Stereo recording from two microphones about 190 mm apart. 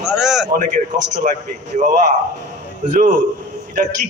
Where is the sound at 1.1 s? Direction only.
40° right (ahead or behind).